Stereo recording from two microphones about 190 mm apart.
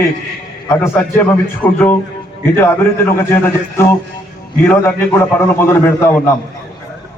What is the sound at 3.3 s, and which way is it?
A man's voice, 15° left (ahead or behind).